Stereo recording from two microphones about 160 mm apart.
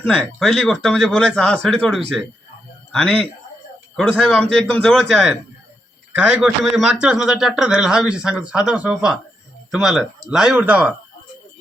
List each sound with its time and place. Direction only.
0.0 s a man's voice: centre (ahead or behind)
4.5 s a man's voice: 5° left (ahead or behind)